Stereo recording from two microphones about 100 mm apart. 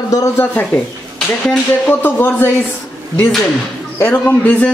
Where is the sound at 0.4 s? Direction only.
15° left (ahead or behind).